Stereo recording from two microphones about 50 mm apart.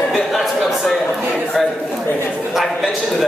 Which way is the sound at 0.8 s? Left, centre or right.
Centre.